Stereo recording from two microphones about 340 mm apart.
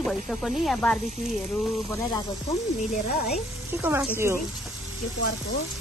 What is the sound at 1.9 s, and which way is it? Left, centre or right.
Frying, centre.